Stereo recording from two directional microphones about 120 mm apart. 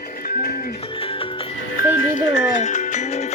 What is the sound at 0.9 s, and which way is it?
Music, 50° left (ahead or behind).